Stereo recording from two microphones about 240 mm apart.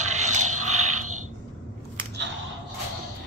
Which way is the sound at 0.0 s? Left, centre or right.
Right.